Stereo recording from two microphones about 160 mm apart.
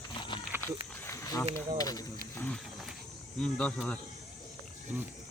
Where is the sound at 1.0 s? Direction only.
20° left (ahead or behind).